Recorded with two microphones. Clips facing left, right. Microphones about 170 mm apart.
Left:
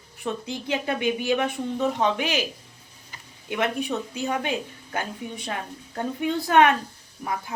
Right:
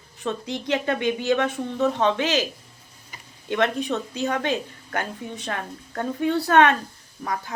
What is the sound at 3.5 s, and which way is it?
Speech, 15° left (ahead or behind).